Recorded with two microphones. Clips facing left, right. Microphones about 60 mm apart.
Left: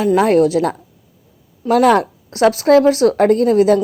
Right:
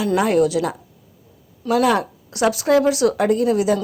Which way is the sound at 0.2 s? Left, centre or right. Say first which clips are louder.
Left 3 dB; left.